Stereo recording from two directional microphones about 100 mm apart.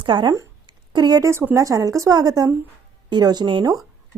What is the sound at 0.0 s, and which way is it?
A woman's voice, 50° right (ahead or behind).